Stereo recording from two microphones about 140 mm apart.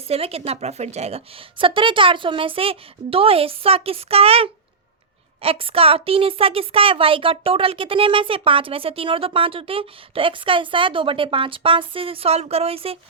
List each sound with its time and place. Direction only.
0.1 s a woman's voice: 45° right (ahead or behind)